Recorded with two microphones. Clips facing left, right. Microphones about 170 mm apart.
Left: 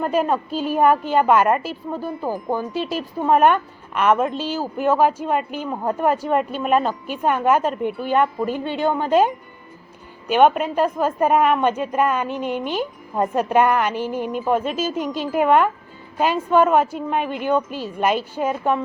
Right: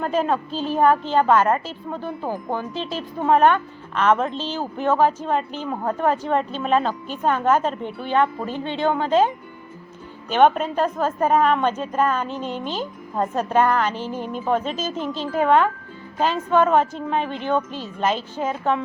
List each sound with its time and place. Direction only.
0.0 s a woman's voice: 10° left (ahead or behind)